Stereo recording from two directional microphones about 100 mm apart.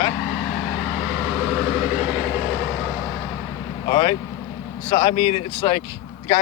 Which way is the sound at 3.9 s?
45° left (ahead or behind).